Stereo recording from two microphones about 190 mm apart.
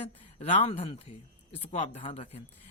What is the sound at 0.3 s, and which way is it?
A man's voice, 35° left (ahead or behind).